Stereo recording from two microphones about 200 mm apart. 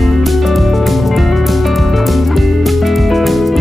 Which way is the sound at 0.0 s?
Centre (ahead or behind).